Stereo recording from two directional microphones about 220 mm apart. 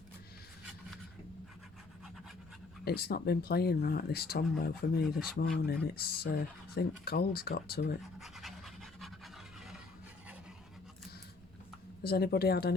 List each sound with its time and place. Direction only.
2.8 s speech: 45° left (ahead or behind)
8.0 s pant: centre (ahead or behind)
12.0 s speech: 45° left (ahead or behind)